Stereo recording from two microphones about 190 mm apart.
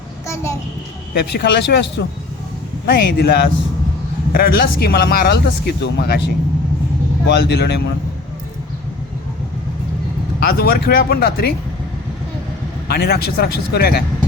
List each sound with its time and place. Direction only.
1.1 s speech: 60° left (ahead or behind)
10.4 s speech: 55° left (ahead or behind)
12.9 s speech: 55° left (ahead or behind)